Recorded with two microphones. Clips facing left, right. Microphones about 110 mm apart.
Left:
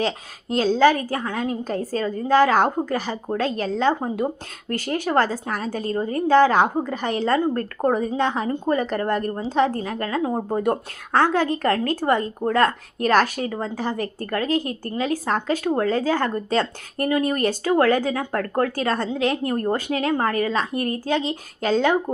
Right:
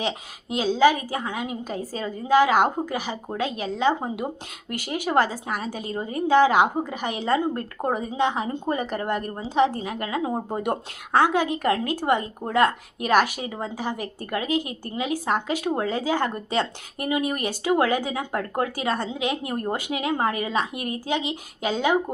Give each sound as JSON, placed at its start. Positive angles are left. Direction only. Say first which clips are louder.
{"t": 0.0, "sound": "speech", "louder": "left 4 dB", "side_deg": -10}